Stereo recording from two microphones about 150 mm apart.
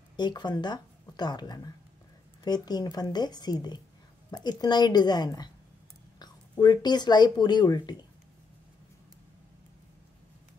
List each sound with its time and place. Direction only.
0.1 s speech: 30° left (ahead or behind)
6.6 s speech: 30° left (ahead or behind)